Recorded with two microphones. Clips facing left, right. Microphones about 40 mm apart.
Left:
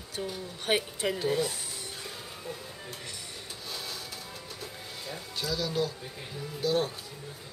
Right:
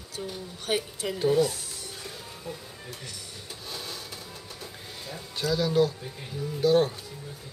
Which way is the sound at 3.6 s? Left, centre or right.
Centre.